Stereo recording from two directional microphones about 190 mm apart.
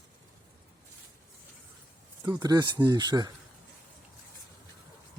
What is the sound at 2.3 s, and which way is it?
Speech, 20° right (ahead or behind).